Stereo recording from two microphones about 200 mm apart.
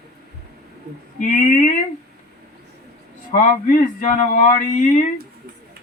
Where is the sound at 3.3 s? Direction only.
40° left (ahead or behind).